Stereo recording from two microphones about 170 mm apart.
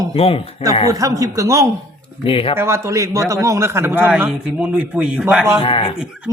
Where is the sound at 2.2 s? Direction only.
35° left (ahead or behind).